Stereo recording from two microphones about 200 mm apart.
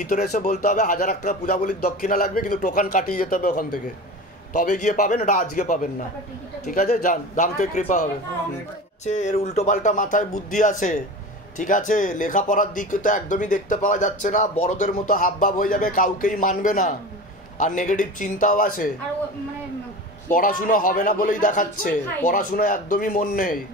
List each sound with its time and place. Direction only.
0.1 s a man's voice: 40° left (ahead or behind)
20.2 s a man's voice: 45° left (ahead or behind)